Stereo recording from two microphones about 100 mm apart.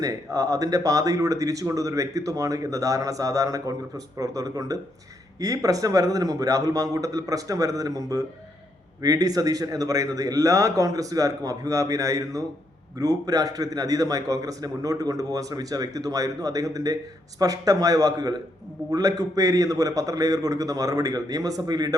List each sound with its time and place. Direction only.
0.0 s speech: 35° right (ahead or behind)